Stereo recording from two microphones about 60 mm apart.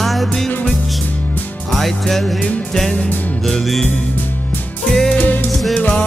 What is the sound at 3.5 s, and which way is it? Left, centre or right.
Music, centre.